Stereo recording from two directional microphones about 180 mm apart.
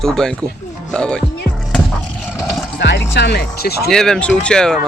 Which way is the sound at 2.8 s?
75° left (ahead or behind).